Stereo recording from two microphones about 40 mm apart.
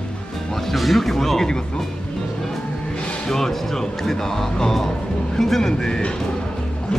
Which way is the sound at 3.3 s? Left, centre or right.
Centre.